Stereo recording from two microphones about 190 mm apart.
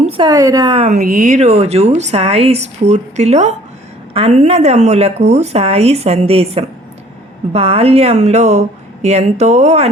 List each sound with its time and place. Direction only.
0.0 s a woman's voice: 25° right (ahead or behind)
0.9 s speech: 45° right (ahead or behind)